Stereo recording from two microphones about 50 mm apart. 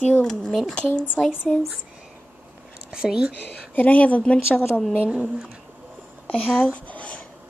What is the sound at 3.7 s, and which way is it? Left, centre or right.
Speech, left.